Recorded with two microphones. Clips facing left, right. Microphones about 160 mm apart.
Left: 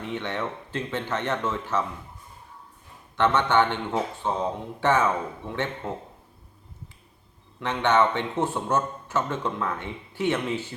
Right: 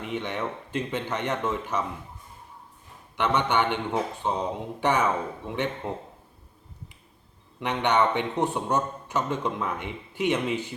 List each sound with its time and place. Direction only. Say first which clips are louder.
0.0 s a man's voice: even; 15° right (ahead or behind)
3.2 s a man's voice: left 3 dB; 15° right (ahead or behind)
7.6 s a man's voice: left 1 dB; 15° right (ahead or behind)